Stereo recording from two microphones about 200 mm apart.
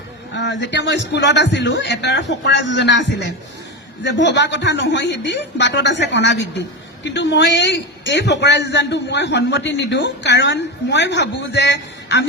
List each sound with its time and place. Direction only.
0.3 s speech: 60° left (ahead or behind)